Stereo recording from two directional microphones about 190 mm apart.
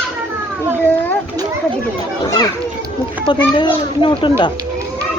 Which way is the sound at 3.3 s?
25° left (ahead or behind).